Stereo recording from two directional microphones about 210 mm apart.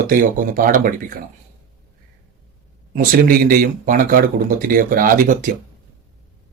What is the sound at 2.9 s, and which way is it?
A man's voice, 40° right (ahead or behind).